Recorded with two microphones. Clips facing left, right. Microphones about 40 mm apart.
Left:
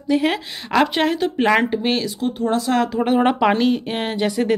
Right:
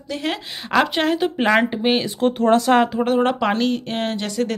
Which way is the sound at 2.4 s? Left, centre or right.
Right.